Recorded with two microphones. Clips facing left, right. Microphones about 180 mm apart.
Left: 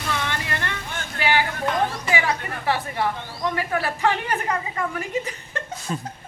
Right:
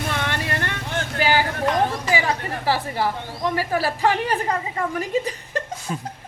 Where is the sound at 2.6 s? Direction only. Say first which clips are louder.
Right 1 dB; 35° right (ahead or behind).